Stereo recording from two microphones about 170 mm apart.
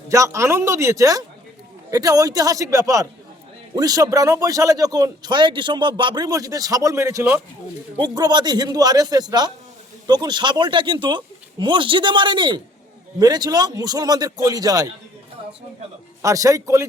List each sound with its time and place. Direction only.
0.1 s speech: 15° right (ahead or behind)
16.2 s speech: 20° right (ahead or behind)